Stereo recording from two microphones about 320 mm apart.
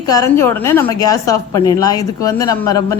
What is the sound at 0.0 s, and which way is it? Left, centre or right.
A woman's voice, centre.